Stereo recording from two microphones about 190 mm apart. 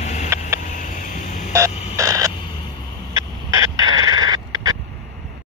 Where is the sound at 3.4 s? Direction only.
20° right (ahead or behind).